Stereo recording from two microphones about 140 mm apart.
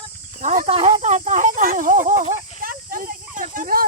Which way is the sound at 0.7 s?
45° right (ahead or behind).